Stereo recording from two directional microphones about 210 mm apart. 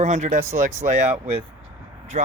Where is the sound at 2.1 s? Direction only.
35° right (ahead or behind).